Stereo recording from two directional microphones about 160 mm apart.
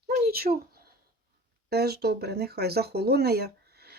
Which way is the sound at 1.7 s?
85° right.